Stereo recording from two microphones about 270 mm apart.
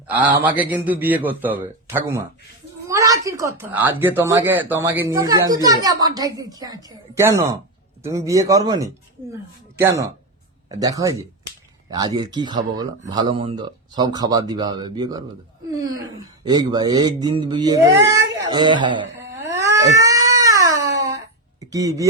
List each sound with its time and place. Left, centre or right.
0.1 s speech: centre
16.4 s speech: centre
19.4 s cat: centre
21.6 s speech: centre